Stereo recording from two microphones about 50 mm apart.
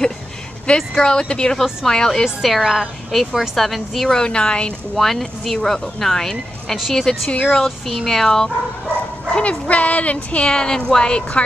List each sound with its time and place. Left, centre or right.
0.7 s speech: centre
2.2 s speech: centre
4.2 s speech: centre
4.9 s speech: centre
7.3 s speech: left
7.6 s speech: centre
9.3 s speech: left